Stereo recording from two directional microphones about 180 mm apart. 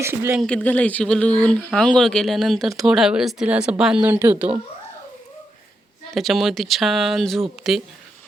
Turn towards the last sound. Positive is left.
turn(degrees=0)  # may be behind; listen again after turning